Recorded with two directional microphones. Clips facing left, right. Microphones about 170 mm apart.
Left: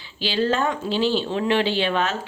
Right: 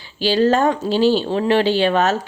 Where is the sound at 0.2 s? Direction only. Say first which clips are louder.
Right 7 dB; 40° right (ahead or behind).